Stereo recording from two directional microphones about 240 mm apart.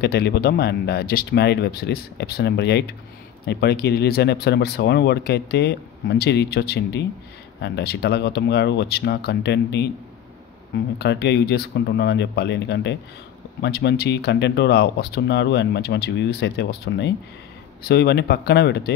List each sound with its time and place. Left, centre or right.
0.0 s speech: left
11.0 s speech: left